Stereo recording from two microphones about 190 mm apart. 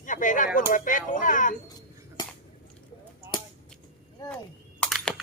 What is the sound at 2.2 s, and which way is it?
Scissors, 20° left (ahead or behind).